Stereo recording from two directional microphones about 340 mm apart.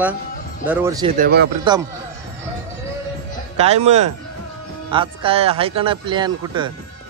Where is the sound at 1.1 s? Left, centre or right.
Right.